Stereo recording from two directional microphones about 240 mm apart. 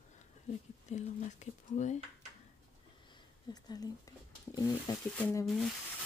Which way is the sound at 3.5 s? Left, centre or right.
Centre.